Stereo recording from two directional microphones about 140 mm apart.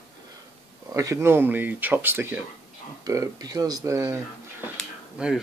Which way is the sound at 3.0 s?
25° right (ahead or behind).